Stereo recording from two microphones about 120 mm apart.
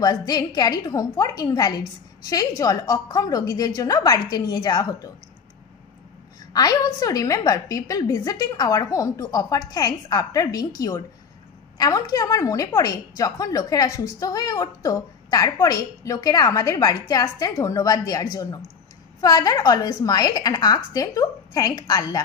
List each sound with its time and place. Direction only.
0.0 s a woman's voice: 35° left (ahead or behind)
6.5 s a woman's voice: 30° left (ahead or behind)